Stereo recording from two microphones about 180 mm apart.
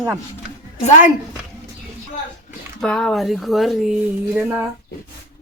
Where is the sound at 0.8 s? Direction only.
35° left (ahead or behind).